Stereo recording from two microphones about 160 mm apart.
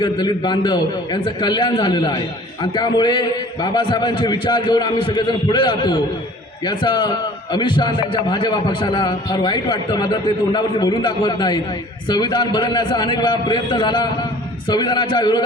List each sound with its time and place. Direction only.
0.0 s a man's voice: 25° left (ahead or behind)